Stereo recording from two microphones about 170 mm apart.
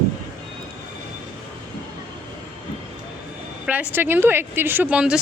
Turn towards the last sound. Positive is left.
turn(degrees=-5)  # may be behind; listen again after turning